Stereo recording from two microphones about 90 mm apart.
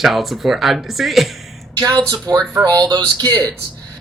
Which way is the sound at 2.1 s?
50° right (ahead or behind).